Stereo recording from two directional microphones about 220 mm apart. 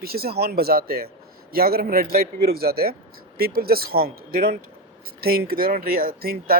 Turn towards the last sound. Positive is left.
turn(degrees=-45)  # may be behind; listen again after turning